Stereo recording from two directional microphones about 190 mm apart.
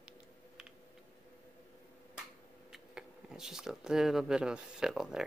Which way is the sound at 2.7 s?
5° right (ahead or behind).